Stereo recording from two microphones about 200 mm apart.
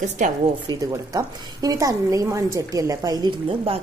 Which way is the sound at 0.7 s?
20° right (ahead or behind).